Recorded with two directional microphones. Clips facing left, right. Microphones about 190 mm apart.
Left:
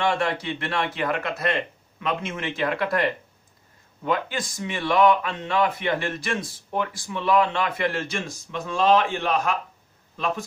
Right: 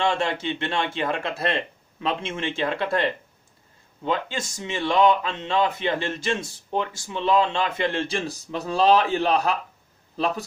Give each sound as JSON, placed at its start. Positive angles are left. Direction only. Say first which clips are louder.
{"t": 0.0, "sound": "speech", "louder": "even", "side_deg": -25}